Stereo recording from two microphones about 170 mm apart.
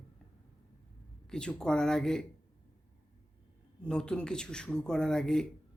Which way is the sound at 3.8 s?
5° left (ahead or behind).